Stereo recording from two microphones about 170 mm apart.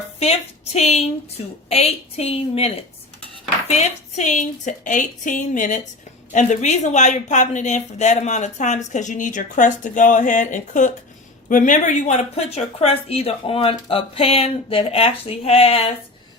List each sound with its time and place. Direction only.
0.2 s a woman's voice: 40° left (ahead or behind)